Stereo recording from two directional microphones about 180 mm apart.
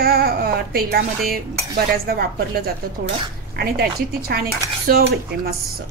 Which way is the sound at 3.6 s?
60° right (ahead or behind).